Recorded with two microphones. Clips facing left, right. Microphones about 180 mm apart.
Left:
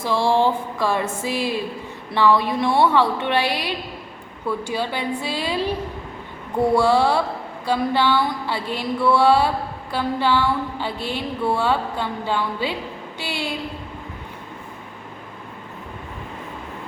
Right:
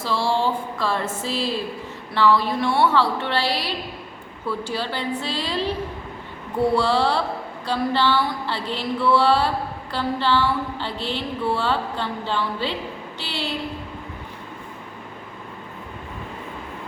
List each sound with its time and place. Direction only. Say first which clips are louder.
0.0 s a woman's voice: left 4 dB; 20° left (ahead or behind)